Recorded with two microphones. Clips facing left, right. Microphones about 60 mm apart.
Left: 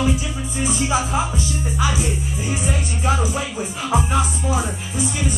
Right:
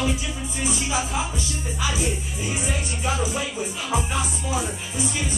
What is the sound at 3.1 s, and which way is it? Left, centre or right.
Speech, left.